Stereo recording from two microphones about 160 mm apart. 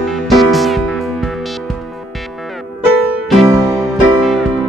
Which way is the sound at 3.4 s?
20° right (ahead or behind).